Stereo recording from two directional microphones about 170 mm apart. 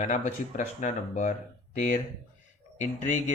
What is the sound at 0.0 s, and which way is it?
Speech, 45° left (ahead or behind).